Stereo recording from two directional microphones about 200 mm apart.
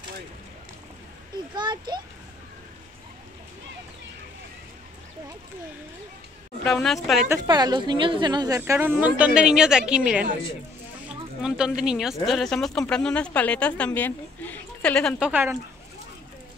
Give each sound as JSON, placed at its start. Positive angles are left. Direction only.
{"t": 1.5, "sound": "a child's voice", "side_deg": -20}
{"t": 6.6, "sound": "speech", "side_deg": 0}
{"t": 7.2, "sound": "speech", "side_deg": -20}